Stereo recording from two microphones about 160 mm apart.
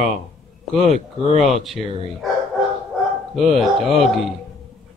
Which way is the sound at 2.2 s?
Centre (ahead or behind).